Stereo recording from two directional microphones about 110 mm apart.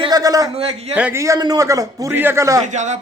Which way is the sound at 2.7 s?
90° right.